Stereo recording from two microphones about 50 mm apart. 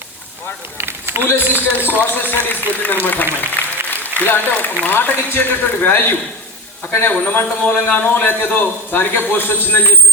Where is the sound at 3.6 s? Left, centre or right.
Left.